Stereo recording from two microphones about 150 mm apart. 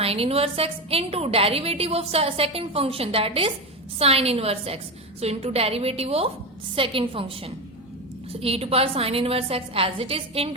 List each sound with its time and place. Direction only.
0.0 s a woman's voice: 40° right (ahead or behind)